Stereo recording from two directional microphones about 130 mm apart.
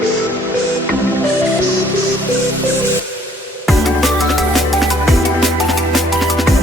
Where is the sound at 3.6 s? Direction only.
Centre (ahead or behind).